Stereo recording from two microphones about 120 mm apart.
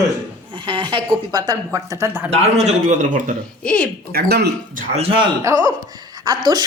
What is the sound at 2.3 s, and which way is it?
A man's voice, 70° right (ahead or behind).